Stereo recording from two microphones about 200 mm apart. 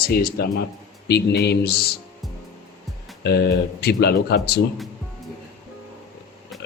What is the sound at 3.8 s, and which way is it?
Speech, 55° left (ahead or behind).